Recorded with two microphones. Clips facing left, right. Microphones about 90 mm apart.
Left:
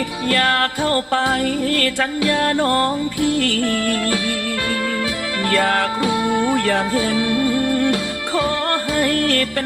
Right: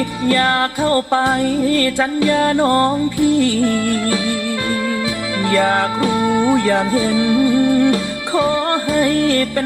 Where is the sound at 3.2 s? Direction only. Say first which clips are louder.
Right 5 dB; 60° left (ahead or behind).